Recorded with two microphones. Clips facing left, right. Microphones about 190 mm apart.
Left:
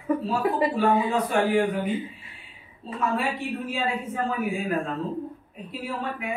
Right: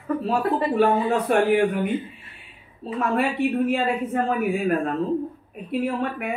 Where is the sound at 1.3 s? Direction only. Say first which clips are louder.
Right 5 dB; 60° right (ahead or behind).